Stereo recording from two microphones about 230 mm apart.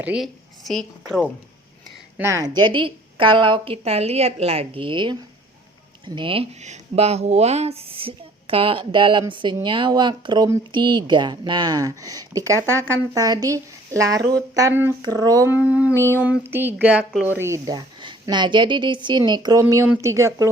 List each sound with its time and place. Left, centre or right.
0.0 s a woman's voice: centre
2.1 s a woman's voice: centre
6.1 s a woman's voice: right